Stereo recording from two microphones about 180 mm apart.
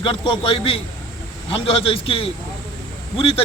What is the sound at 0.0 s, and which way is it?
Speech, 30° left (ahead or behind).